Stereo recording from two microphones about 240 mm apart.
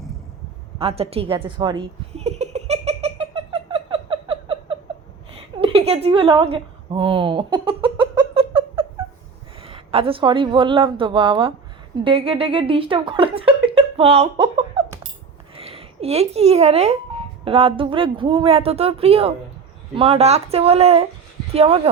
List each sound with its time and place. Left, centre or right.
0.8 s speech: right
1.4 s giggle: centre
5.5 s a sound: right
9.6 s a woman's voice: right